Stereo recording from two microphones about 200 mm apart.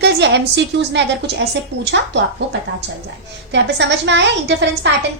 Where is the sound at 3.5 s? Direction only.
60° right (ahead or behind).